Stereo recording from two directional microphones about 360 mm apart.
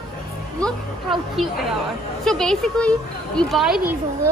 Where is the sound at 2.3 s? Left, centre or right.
Centre.